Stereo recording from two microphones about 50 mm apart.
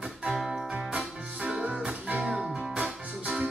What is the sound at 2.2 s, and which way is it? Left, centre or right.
Music, centre.